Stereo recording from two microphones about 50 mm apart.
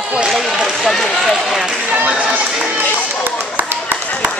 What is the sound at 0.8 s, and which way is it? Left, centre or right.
Speech, centre.